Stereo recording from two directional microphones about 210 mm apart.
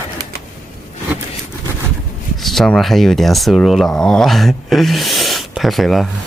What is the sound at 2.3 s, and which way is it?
Speech, centre (ahead or behind).